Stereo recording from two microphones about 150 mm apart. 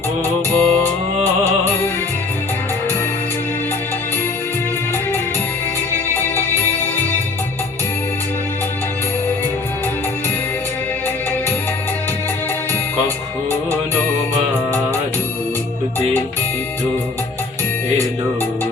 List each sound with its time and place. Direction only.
0.5 s music: 10° left (ahead or behind)
5.9 s music: 15° left (ahead or behind)
13.5 s music: 10° left (ahead or behind)